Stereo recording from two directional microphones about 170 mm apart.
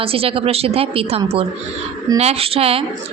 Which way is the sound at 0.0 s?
35° right (ahead or behind).